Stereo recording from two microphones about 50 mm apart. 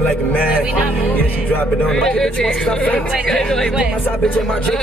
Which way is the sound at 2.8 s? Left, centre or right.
Left.